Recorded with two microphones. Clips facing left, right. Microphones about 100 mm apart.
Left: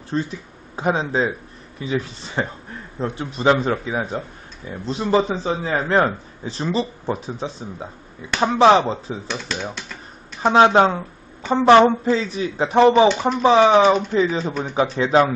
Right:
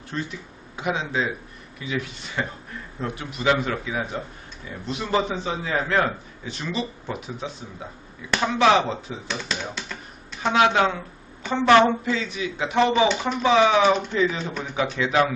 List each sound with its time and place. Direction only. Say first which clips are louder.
0.1 s a man's voice: left 7 dB; 30° left (ahead or behind)
9.3 s speech: left 1 dB; centre (ahead or behind)
10.4 s a man's voice: left 6 dB; 35° left (ahead or behind)